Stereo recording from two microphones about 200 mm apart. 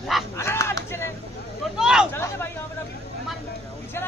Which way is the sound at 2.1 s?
10° left (ahead or behind).